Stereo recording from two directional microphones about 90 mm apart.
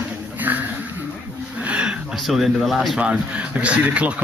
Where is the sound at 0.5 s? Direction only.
20° right (ahead or behind).